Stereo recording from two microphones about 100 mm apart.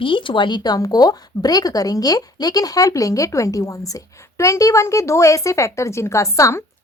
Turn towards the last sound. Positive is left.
turn(degrees=30)  # may be behind; listen again after turning